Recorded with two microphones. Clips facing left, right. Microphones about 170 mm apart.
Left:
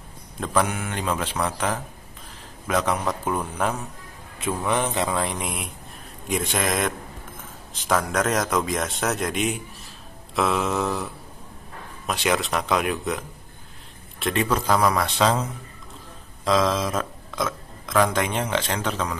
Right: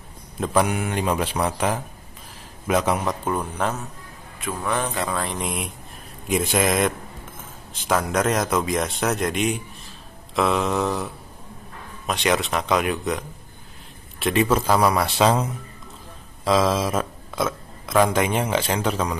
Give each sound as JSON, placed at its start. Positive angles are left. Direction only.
{"t": 0.4, "sound": "speech", "side_deg": -10}
{"t": 3.6, "sound": "speech", "side_deg": 10}
{"t": 4.6, "sound": "speech", "side_deg": 20}
{"t": 6.2, "sound": "a man's voice", "side_deg": -5}
{"t": 7.9, "sound": "a man's voice", "side_deg": 0}
{"t": 14.2, "sound": "speech", "side_deg": -5}
{"t": 16.4, "sound": "speech", "side_deg": -5}